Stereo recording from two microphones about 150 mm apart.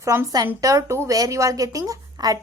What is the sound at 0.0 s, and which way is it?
A woman's voice, 20° right (ahead or behind).